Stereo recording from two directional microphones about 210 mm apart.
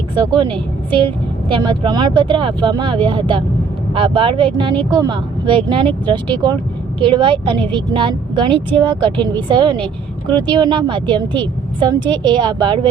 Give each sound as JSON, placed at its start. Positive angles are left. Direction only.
{"t": 0.9, "sound": "a woman's voice", "side_deg": -25}